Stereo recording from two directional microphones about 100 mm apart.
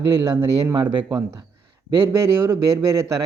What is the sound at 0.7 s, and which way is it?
Speech, 45° right (ahead or behind).